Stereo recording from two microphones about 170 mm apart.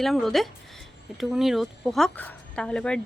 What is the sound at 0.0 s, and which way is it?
A woman's voice, centre (ahead or behind).